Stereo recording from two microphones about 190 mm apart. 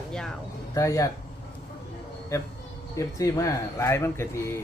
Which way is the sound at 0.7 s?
15° left (ahead or behind).